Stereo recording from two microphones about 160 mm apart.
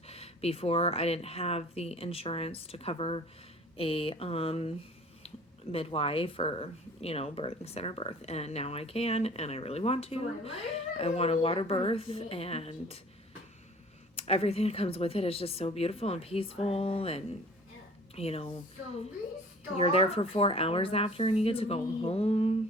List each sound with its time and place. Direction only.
0.1 s speech: 40° left (ahead or behind)
5.7 s speech: 35° left (ahead or behind)
14.2 s speech: 40° left (ahead or behind)